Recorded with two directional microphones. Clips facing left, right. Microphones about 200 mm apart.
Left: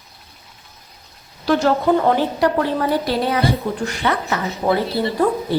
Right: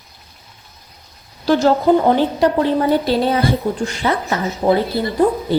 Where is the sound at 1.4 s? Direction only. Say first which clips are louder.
Right 3 dB; 25° right (ahead or behind).